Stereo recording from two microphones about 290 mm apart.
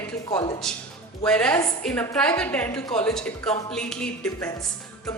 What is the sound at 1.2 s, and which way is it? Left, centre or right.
A woman's voice, centre.